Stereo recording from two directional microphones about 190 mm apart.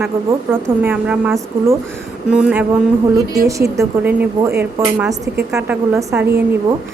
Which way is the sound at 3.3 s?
15° right (ahead or behind).